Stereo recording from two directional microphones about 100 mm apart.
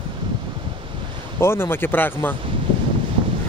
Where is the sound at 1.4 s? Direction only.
25° left (ahead or behind).